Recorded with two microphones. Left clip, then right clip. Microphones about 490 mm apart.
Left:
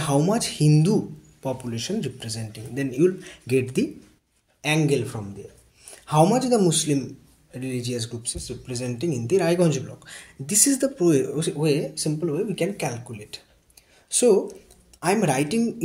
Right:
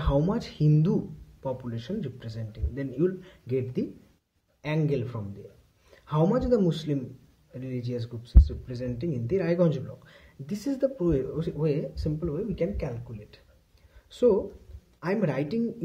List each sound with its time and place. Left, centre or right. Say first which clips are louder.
0.0 s speech: left 5 dB; right
15.0 s speech: left 7 dB; right